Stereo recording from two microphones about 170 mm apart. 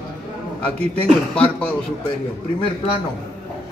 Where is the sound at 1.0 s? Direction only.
5° left (ahead or behind).